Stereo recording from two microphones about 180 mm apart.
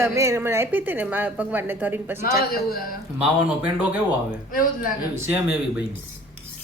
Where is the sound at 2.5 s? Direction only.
55° left (ahead or behind).